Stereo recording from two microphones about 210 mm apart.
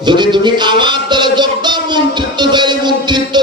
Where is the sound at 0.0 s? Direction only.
20° right (ahead or behind).